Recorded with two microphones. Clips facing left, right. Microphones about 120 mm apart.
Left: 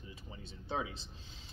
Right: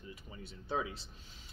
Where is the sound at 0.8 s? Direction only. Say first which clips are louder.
Right 1 dB; 25° left (ahead or behind).